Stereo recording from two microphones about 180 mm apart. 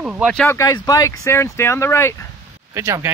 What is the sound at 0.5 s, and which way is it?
Speech, 15° left (ahead or behind).